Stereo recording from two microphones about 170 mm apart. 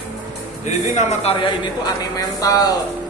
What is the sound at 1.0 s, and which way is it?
A man's voice, 40° left (ahead or behind).